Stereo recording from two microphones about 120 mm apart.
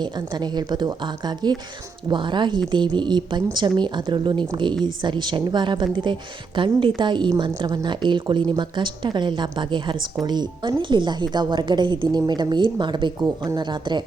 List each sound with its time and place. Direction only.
0.0 s a woman's voice: 35° right (ahead or behind)